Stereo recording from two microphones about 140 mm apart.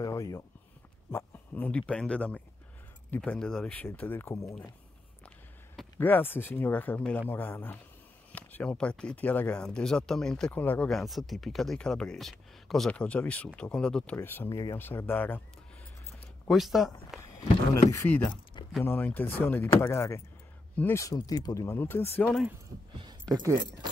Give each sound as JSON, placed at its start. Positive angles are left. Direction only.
{"t": 0.0, "sound": "a sound", "side_deg": 25}
{"t": 1.1, "sound": "speech", "side_deg": 10}
{"t": 5.9, "sound": "speech", "side_deg": 15}
{"t": 16.4, "sound": "speech", "side_deg": 0}
{"t": 17.9, "sound": "speech", "side_deg": 15}
{"t": 18.6, "sound": "keys jangling", "side_deg": 30}
{"t": 18.9, "sound": "speech", "side_deg": 15}
{"t": 23.0, "sound": "speech", "side_deg": -30}